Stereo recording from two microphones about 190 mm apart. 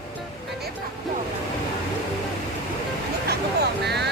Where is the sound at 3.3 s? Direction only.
60° right (ahead or behind).